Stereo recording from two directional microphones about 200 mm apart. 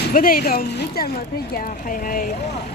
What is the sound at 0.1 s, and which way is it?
Speech, 45° left (ahead or behind).